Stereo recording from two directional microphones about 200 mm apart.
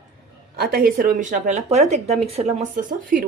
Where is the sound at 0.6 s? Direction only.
50° right (ahead or behind).